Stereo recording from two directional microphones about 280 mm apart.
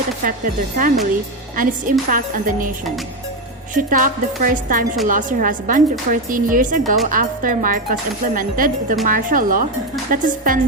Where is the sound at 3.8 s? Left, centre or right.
Right.